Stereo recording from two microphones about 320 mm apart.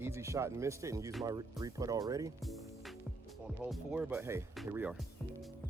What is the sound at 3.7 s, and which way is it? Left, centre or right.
Speech, centre.